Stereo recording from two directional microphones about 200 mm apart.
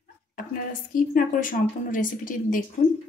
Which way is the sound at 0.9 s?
45° left (ahead or behind).